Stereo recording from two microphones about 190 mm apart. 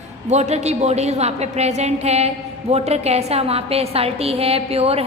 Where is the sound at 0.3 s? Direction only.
35° right (ahead or behind).